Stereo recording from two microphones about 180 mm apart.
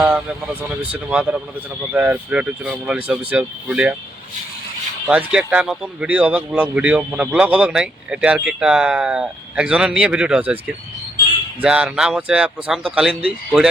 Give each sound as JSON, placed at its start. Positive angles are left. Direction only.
{"t": 0.0, "sound": "speech", "side_deg": -5}
{"t": 5.0, "sound": "speech", "side_deg": -5}